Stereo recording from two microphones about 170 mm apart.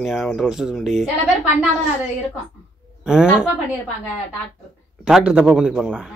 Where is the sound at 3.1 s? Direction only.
5° right (ahead or behind).